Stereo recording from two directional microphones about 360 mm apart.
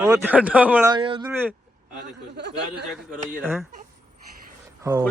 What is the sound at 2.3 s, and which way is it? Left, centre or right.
Speech, right.